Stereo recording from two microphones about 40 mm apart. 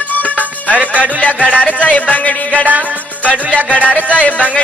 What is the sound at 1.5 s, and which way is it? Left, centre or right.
Music, left.